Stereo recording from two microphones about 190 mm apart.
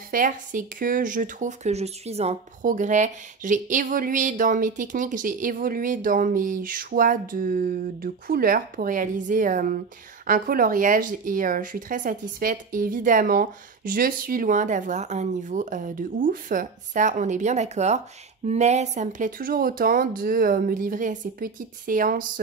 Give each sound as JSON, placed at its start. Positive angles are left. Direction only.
{"t": 0.1, "sound": "speech", "side_deg": -45}